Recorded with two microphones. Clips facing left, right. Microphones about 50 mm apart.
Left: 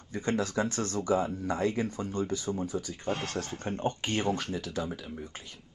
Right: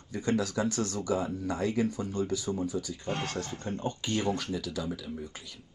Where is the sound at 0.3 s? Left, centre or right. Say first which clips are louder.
Right 1 dB; left.